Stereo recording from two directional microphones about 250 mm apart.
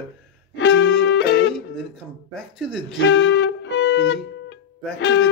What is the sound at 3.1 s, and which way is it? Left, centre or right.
Music, left.